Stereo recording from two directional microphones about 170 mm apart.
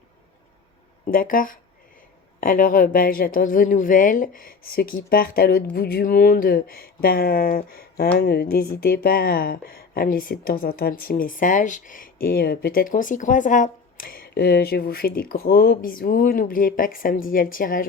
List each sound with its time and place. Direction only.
1.0 s speech: 55° left (ahead or behind)